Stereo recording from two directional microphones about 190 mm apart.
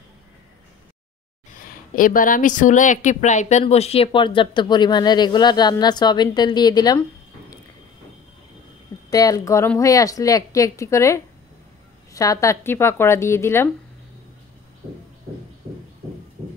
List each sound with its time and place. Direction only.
1.5 s speech: 45° left (ahead or behind); by 7.0 s 20° left (ahead or behind)
9.1 s a woman's voice: 20° left (ahead or behind)